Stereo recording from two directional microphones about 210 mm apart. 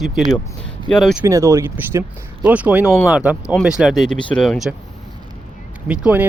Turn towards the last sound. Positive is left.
turn(degrees=-5)  # may be behind; listen again after turning